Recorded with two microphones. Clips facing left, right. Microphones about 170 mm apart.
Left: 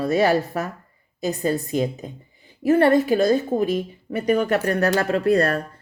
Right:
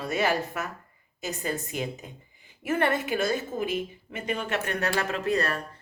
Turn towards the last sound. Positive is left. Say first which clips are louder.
# left 8 dB
turn(degrees=35)  # may be behind; listen again after turning